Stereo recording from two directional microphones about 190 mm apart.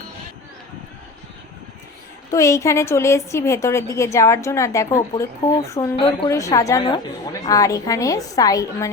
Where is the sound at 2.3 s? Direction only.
15° left (ahead or behind).